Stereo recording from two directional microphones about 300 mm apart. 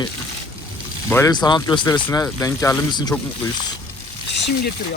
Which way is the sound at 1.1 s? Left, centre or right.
Centre.